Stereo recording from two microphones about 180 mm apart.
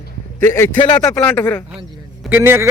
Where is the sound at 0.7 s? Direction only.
25° left (ahead or behind).